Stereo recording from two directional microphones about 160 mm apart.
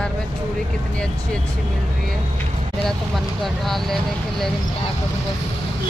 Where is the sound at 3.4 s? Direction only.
Centre (ahead or behind).